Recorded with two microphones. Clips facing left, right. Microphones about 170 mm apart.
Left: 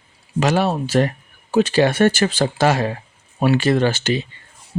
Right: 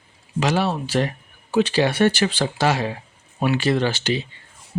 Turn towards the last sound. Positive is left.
turn(degrees=45)  # may be behind; listen again after turning